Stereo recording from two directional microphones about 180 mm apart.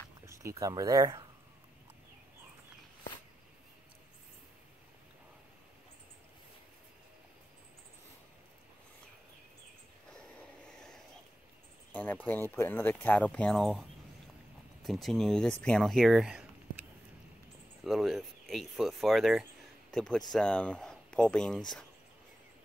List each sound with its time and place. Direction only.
0.3 s speech: 15° right (ahead or behind)
11.9 s speech: 10° left (ahead or behind)
17.8 s speech: centre (ahead or behind)